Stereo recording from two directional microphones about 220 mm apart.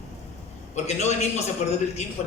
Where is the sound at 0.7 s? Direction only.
30° left (ahead or behind).